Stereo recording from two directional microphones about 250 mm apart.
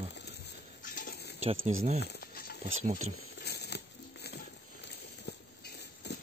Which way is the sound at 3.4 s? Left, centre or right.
Left.